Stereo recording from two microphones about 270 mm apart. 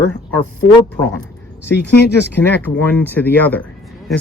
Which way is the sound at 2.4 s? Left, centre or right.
Centre.